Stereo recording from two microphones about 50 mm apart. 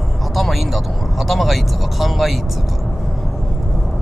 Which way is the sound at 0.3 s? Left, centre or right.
Centre.